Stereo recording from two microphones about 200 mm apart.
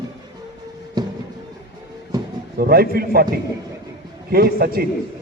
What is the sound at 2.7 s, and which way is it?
Speech, 50° right (ahead or behind).